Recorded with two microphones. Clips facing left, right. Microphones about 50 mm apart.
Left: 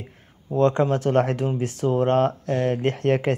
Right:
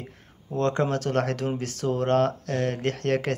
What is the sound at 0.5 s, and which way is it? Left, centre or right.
Speech, left.